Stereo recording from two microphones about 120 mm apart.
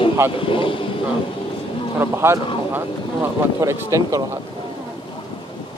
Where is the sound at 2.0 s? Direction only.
20° right (ahead or behind).